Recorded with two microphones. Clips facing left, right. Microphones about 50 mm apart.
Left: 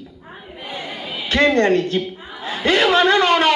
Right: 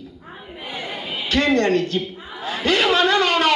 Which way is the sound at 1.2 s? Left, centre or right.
Left.